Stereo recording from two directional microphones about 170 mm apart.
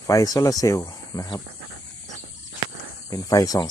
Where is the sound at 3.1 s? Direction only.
20° left (ahead or behind).